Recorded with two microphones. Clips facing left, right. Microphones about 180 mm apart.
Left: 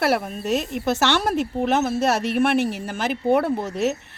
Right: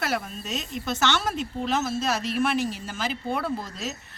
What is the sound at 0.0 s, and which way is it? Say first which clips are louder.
Speech: left 8 dB; 65° left (ahead or behind).